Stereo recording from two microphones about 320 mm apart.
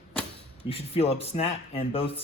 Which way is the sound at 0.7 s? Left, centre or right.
Centre.